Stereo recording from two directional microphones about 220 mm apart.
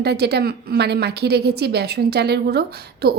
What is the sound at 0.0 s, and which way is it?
A woman's voice, 50° right (ahead or behind).